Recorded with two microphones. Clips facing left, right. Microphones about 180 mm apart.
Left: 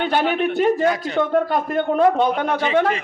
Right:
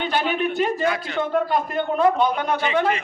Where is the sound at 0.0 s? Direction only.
55° left (ahead or behind).